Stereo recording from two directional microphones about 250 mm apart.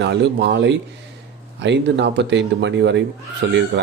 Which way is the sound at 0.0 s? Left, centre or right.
Right.